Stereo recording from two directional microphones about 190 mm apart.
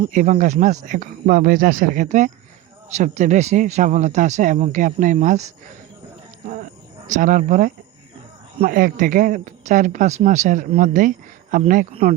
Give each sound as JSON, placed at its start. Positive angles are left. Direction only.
{"t": 0.1, "sound": "a woman's voice", "side_deg": -40}
{"t": 7.1, "sound": "a woman's voice", "side_deg": -45}